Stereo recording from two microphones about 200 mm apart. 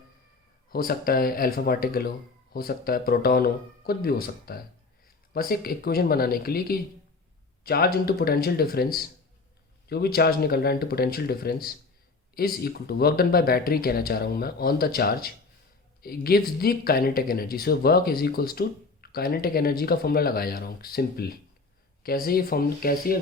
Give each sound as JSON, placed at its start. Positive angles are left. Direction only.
{"t": 0.7, "sound": "speech", "side_deg": 45}